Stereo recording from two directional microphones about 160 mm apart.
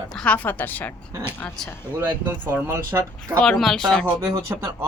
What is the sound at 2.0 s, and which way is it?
Speech, 10° right (ahead or behind).